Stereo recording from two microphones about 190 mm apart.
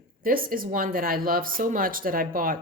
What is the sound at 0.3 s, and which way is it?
A woman's voice, 50° right (ahead or behind).